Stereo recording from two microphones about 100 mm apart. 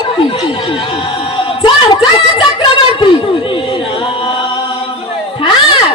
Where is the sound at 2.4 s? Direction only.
50° left (ahead or behind).